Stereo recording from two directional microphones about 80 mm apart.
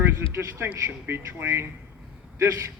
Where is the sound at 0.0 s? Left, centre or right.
Right.